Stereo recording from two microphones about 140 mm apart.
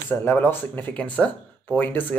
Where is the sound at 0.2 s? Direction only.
15° left (ahead or behind).